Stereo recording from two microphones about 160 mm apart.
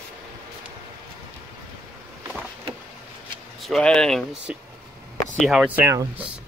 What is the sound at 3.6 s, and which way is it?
Speech, 5° left (ahead or behind).